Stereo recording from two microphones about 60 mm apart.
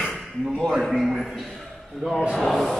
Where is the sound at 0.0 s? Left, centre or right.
Centre.